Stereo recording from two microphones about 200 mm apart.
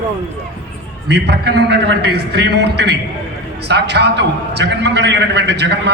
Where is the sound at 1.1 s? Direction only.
55° right (ahead or behind).